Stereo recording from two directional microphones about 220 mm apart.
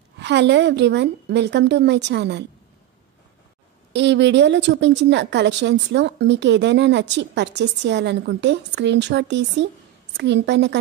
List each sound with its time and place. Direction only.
0.2 s a woman's voice: 50° right (ahead or behind)
3.9 s a woman's voice: 55° right (ahead or behind)